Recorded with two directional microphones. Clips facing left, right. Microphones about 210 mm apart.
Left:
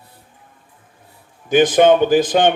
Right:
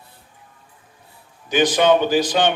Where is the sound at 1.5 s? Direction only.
50° left (ahead or behind).